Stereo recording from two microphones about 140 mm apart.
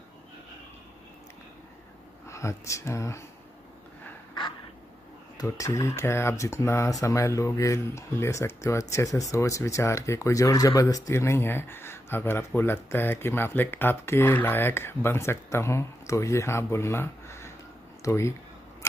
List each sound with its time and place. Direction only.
2.2 s speech: 20° left (ahead or behind)
5.4 s speech: 25° left (ahead or behind)